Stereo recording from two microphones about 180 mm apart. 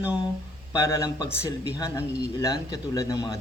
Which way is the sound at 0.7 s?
15° left (ahead or behind).